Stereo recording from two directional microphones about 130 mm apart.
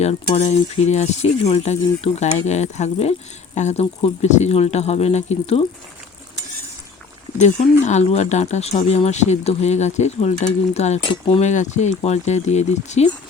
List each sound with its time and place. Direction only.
0.0 s speech: 55° left (ahead or behind)
7.3 s speech: 60° left (ahead or behind)